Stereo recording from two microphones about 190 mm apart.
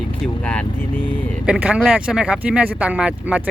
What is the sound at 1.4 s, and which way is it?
Speech, 5° right (ahead or behind).